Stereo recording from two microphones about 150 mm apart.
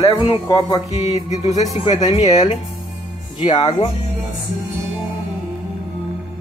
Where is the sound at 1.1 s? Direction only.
50° left (ahead or behind).